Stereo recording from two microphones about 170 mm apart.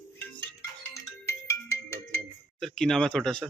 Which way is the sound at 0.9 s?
15° left (ahead or behind).